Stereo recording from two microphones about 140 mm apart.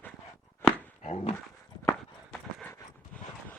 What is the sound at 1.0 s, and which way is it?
Dog, 50° left (ahead or behind).